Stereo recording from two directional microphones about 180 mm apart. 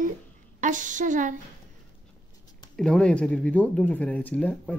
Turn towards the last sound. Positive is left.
turn(degrees=5)  # may be behind; listen again after turning